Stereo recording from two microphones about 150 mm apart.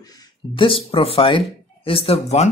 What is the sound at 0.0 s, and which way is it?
Speech, 25° left (ahead or behind).